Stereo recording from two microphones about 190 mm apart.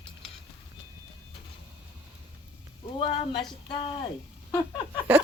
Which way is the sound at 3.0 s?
30° left (ahead or behind).